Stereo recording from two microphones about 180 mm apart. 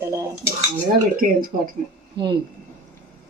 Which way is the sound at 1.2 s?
50° right (ahead or behind).